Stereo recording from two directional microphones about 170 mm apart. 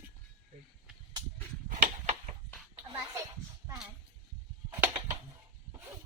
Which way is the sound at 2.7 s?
15° right (ahead or behind).